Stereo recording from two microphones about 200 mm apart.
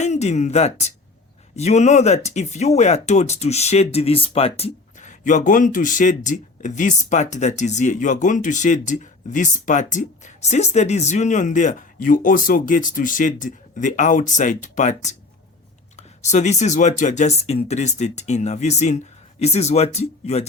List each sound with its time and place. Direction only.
0.0 s speech: 35° left (ahead or behind)